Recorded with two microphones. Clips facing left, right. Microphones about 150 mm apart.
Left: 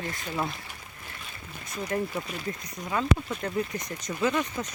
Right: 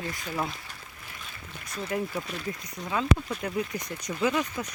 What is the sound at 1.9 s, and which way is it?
Speech, 5° right (ahead or behind).